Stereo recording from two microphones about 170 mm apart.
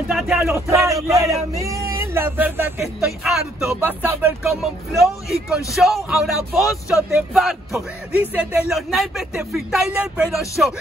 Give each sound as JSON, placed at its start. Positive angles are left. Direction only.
{"t": 0.5, "sound": "speech", "side_deg": -15}
{"t": 3.8, "sound": "speech", "side_deg": -10}
{"t": 4.9, "sound": "speech", "side_deg": 0}